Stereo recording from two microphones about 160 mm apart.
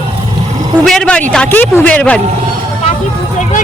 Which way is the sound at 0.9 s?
5° left (ahead or behind).